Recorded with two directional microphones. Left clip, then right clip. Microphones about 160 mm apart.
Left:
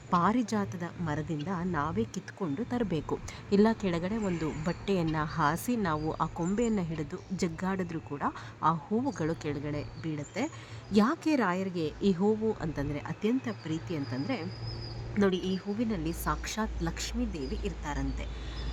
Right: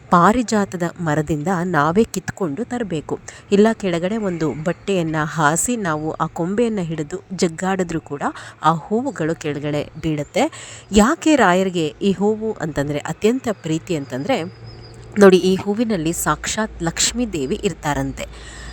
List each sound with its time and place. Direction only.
0.1 s a woman's voice: 55° right (ahead or behind)
2.4 s speech: 40° right (ahead or behind)
2.7 s speech: 30° right (ahead or behind); by 8.8 s 45° right (ahead or behind)
8.9 s speech: 35° right (ahead or behind); by 10.5 s 55° right (ahead or behind)
10.9 s a woman's voice: 45° right (ahead or behind)